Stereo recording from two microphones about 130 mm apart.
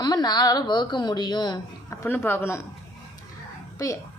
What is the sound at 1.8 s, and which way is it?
Speech, 20° left (ahead or behind).